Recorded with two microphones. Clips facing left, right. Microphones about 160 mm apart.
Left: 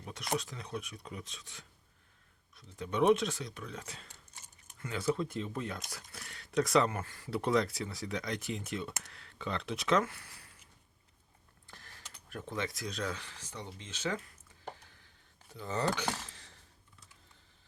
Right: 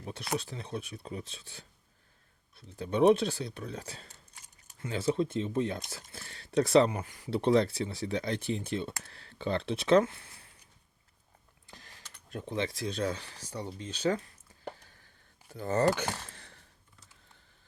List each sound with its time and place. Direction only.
0.0 s speech: 30° right (ahead or behind)
6.9 s speech: 15° right (ahead or behind)
12.3 s speech: 20° right (ahead or behind)
15.5 s speech: 50° right (ahead or behind)
16.0 s a sound: 55° right (ahead or behind)